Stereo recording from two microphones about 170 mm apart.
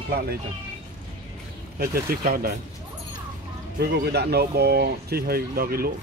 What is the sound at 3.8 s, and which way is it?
Speech, 75° right (ahead or behind).